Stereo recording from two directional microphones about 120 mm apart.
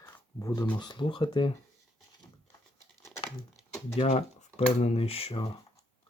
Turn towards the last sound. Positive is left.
turn(degrees=55)  # may be behind; listen again after turning